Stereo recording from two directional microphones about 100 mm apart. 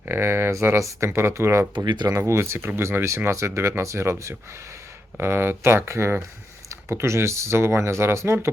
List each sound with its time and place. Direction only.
0.1 s speech: 25° right (ahead or behind)
1.7 s speech: 45° right (ahead or behind)
2.1 s speech: 30° right (ahead or behind)